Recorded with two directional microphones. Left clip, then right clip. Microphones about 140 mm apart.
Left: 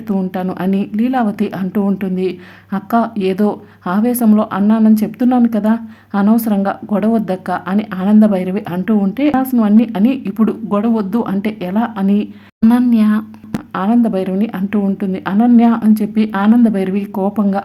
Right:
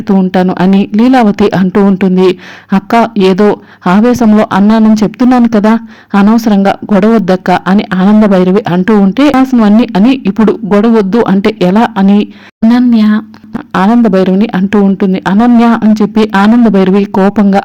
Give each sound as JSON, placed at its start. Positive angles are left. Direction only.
{"t": 0.5, "sound": "speech", "side_deg": -40}
{"t": 12.7, "sound": "speech", "side_deg": -25}
{"t": 14.1, "sound": "speech", "side_deg": -35}